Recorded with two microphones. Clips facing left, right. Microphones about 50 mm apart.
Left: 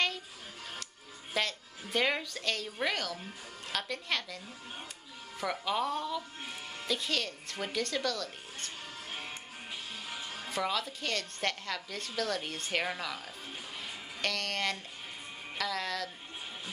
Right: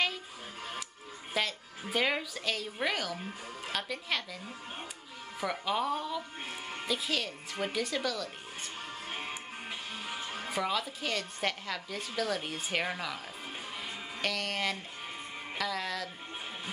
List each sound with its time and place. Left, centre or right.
1.3 s a woman's voice: centre
10.0 s music: right
10.5 s a woman's voice: centre
13.7 s music: centre
15.5 s speech: centre